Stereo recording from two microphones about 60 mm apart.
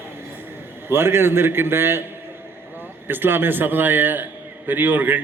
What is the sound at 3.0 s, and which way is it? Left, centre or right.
A man's voice, right.